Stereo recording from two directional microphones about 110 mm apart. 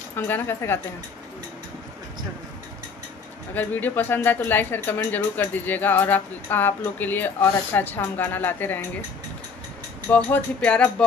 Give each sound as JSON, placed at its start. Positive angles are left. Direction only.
{"t": 0.1, "sound": "speech", "side_deg": 20}
{"t": 3.5, "sound": "speech", "side_deg": 15}
{"t": 10.1, "sound": "speech", "side_deg": 10}